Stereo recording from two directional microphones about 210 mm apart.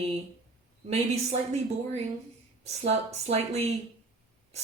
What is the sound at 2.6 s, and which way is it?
Speech, 30° right (ahead or behind).